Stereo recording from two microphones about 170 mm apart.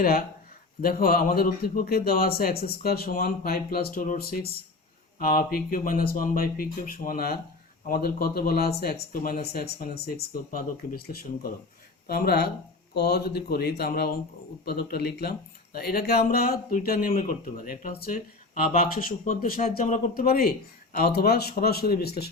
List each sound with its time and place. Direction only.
0.8 s speech: 60° left (ahead or behind)